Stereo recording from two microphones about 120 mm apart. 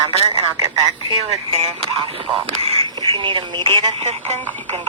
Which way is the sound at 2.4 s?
50° right (ahead or behind).